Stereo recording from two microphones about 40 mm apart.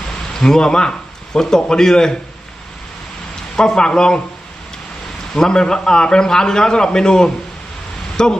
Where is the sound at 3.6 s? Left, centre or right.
Centre.